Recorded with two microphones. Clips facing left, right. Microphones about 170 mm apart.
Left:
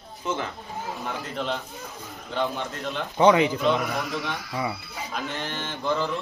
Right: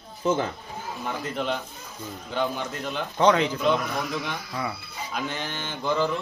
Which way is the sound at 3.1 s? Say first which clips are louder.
Left 2 dB; 15° left (ahead or behind).